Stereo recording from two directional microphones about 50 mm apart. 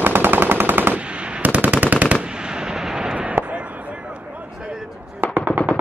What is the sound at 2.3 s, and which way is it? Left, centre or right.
Artillery fire, centre.